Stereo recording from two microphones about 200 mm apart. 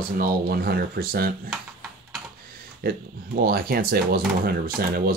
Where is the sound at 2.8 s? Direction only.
50° right (ahead or behind).